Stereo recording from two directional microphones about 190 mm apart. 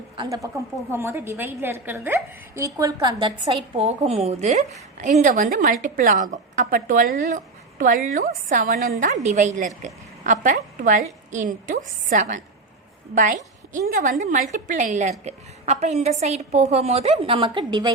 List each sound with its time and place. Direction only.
0.5 s a woman's voice: 15° right (ahead or behind)